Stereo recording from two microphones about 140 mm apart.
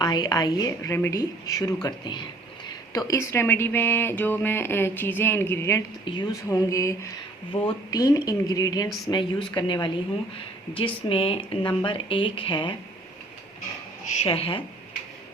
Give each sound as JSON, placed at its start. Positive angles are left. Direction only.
{"t": 0.0, "sound": "speech", "side_deg": 30}
{"t": 6.1, "sound": "a woman's voice", "side_deg": 30}
{"t": 14.1, "sound": "speech", "side_deg": 50}